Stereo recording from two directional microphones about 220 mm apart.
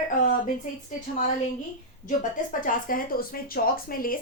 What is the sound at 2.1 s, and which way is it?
A woman's voice, 40° left (ahead or behind).